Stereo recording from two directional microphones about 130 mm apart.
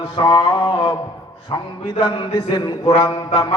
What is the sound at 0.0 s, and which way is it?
Mantra, 35° left (ahead or behind).